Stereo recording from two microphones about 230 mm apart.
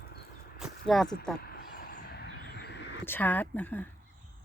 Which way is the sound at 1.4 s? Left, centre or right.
Left.